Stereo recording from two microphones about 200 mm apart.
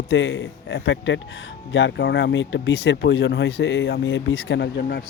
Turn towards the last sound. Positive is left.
turn(degrees=55)  # may be behind; listen again after turning